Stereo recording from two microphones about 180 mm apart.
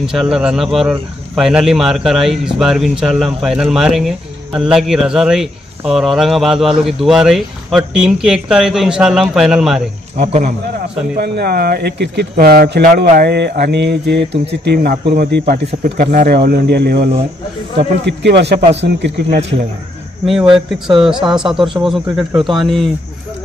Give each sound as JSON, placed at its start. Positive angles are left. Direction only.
{"t": 0.0, "sound": "speech", "side_deg": -5}
{"t": 10.1, "sound": "speech", "side_deg": -40}
{"t": 11.1, "sound": "speech", "side_deg": -60}
{"t": 12.8, "sound": "speech", "side_deg": -50}
{"t": 21.0, "sound": "speech", "side_deg": -5}